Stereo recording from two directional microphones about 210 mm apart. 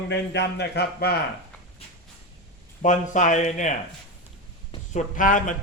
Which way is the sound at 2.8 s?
35° left (ahead or behind).